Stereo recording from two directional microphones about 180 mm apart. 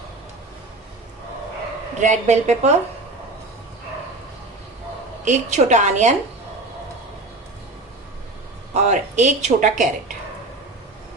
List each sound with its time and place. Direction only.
2.0 s speech: 40° right (ahead or behind)
5.2 s speech: 40° right (ahead or behind)
8.7 s speech: 40° right (ahead or behind)